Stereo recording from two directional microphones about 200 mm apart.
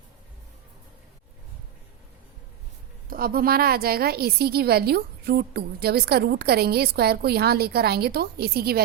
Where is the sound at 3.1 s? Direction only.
45° right (ahead or behind).